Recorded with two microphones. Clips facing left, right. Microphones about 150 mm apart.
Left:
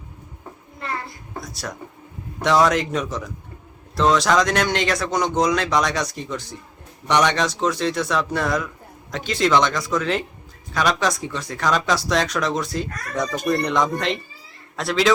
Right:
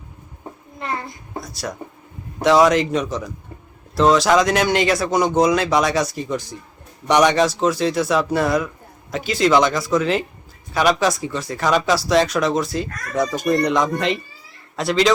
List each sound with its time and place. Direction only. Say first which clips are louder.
0.8 s child singing: right 3 dB; 20° right (ahead or behind)
1.4 s speech: right 3 dB; centre (ahead or behind)